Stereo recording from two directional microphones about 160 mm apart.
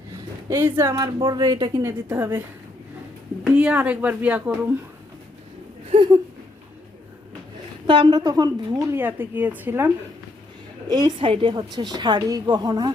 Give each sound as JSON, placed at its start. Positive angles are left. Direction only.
{"t": 0.4, "sound": "a woman's voice", "side_deg": -15}
{"t": 1.8, "sound": "a woman's voice", "side_deg": -15}
{"t": 3.4, "sound": "a woman's voice", "side_deg": -5}
{"t": 7.9, "sound": "a woman's voice", "side_deg": -30}
{"t": 10.8, "sound": "a woman's voice", "side_deg": -25}